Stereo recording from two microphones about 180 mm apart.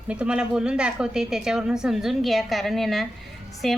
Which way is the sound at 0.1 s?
5° right (ahead or behind).